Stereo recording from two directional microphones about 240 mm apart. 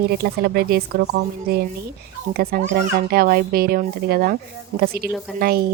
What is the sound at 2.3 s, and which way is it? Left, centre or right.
Speech, right.